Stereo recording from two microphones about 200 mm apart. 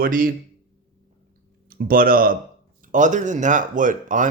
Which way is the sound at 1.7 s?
45° right (ahead or behind).